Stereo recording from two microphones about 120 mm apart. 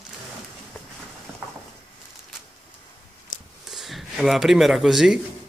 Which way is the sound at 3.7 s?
Centre (ahead or behind).